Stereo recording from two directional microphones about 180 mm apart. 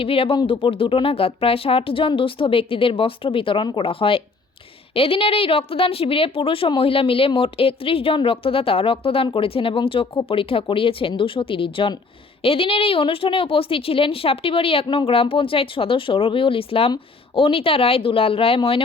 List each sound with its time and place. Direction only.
0.0 s a woman's voice: 30° left (ahead or behind)